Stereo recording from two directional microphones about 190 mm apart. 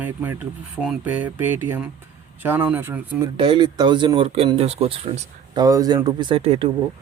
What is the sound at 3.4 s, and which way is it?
Speech, 25° right (ahead or behind).